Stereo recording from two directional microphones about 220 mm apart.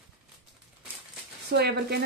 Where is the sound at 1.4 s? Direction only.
50° right (ahead or behind).